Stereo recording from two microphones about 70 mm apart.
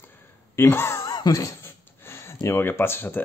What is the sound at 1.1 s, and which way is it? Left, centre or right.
Speech, left.